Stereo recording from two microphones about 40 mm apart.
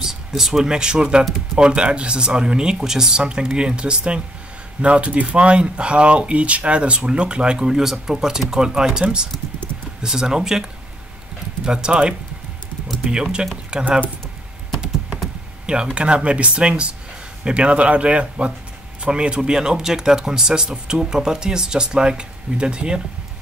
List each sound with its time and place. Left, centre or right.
0.0 s a sound: centre
0.7 s speech: centre
10.0 s speech: centre
11.6 s speech: right
15.6 s speech: right